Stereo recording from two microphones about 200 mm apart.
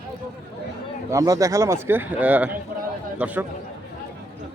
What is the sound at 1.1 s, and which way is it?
Speech, 15° right (ahead or behind).